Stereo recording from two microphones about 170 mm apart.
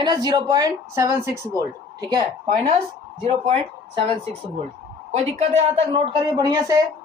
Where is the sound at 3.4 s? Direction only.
35° right (ahead or behind).